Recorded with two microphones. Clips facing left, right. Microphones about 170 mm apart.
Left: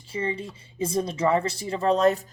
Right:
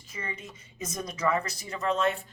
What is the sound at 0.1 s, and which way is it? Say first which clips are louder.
Speech: left 10 dB; 30° left (ahead or behind).